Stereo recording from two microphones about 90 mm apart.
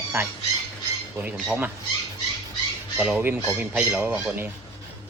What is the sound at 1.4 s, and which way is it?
Speech, 15° right (ahead or behind).